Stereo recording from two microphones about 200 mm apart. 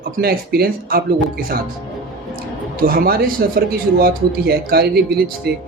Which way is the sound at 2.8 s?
45° right (ahead or behind).